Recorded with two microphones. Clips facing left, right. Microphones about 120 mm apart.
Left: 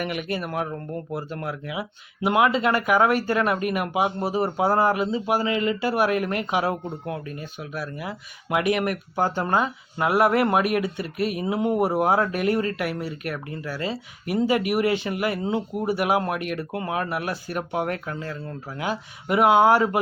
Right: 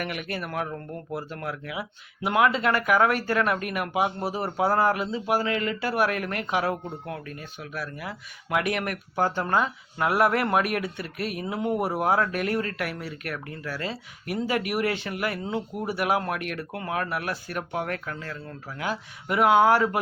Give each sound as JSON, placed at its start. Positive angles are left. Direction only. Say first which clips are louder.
{"t": 0.0, "sound": "a man's voice", "louder": "left 4 dB", "side_deg": 5}
{"t": 4.4, "sound": "a man's voice", "louder": "left 1 dB", "side_deg": 20}
{"t": 18.8, "sound": "a man's voice", "louder": "left 2 dB", "side_deg": 10}